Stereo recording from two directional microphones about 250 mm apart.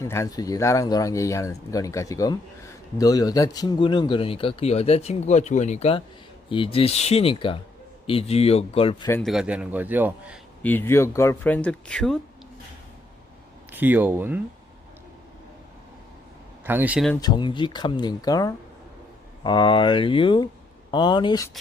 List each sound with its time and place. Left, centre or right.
0.0 s speech: centre
9.0 s a man's voice: centre
10.6 s speech: centre
13.7 s speech: centre
16.6 s a man's voice: centre
17.2 s speech: centre